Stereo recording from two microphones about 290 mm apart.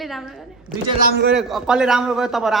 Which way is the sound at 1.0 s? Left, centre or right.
Right.